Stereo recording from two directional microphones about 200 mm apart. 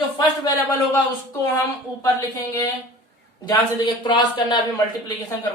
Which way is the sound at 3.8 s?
20° left (ahead or behind).